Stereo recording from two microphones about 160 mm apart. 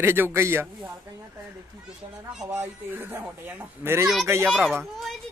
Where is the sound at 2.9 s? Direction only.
10° right (ahead or behind).